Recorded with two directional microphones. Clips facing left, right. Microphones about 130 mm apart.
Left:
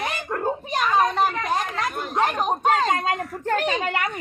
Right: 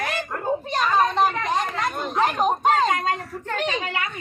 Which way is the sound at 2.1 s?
Centre (ahead or behind).